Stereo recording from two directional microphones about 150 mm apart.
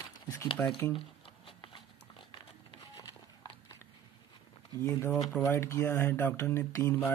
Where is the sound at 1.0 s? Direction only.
35° left (ahead or behind).